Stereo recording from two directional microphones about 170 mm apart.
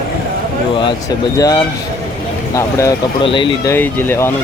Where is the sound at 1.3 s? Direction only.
20° left (ahead or behind).